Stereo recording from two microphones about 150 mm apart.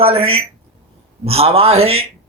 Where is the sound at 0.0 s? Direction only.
40° right (ahead or behind).